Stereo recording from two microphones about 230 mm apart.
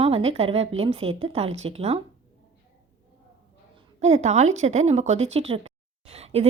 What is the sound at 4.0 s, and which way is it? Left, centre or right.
Speech, right.